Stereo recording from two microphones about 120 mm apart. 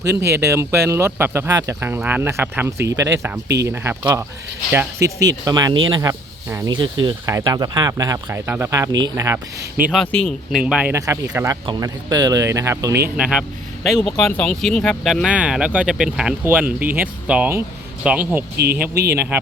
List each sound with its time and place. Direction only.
0.0 s speech: 25° right (ahead or behind)
5.5 s speech: 30° right (ahead or behind)
9.9 s speech: 5° left (ahead or behind)
10.6 s speech: 10° right (ahead or behind)
10.9 s speech: 25° right (ahead or behind)
11.6 s speech: 35° right (ahead or behind)
13.1 s speech: 5° right (ahead or behind)